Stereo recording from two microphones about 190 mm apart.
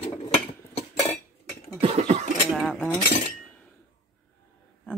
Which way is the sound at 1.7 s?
30° right (ahead or behind).